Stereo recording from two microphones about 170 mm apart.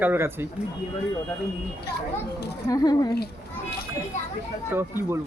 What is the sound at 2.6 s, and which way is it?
Speech, 20° left (ahead or behind).